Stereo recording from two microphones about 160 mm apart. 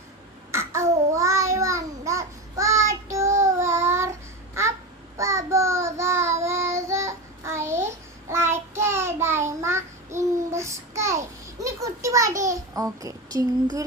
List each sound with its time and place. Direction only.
0.5 s child singing: 15° right (ahead or behind)
5.1 s child singing: 20° right (ahead or behind)
11.6 s a sound: 20° right (ahead or behind)